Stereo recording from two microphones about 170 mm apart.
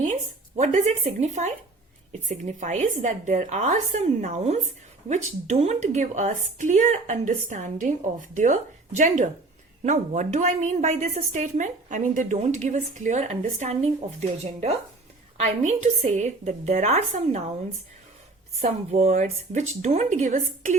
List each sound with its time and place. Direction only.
0.0 s a woman's voice: 45° right (ahead or behind)
18.6 s a woman's voice: 40° right (ahead or behind)